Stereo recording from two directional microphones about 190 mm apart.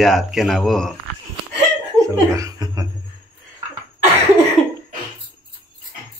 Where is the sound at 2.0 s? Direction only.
15° right (ahead or behind).